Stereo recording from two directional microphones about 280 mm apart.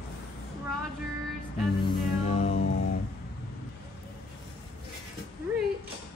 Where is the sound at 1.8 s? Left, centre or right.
Left.